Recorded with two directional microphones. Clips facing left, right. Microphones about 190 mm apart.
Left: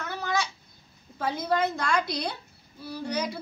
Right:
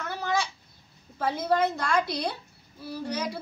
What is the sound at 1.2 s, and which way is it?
A woman's voice, 5° right (ahead or behind).